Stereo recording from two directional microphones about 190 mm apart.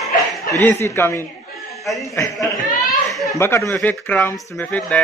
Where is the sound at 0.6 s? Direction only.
15° left (ahead or behind).